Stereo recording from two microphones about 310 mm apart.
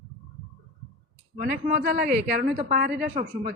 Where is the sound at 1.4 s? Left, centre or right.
Right.